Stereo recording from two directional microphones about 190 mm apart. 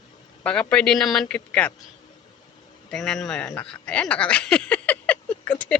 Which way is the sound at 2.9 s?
Centre (ahead or behind).